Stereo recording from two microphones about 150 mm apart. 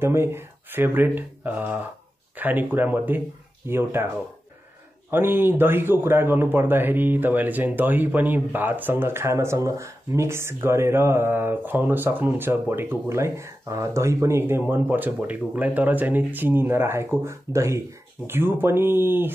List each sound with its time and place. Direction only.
0.0 s speech: 15° right (ahead or behind)
5.1 s speech: 15° right (ahead or behind)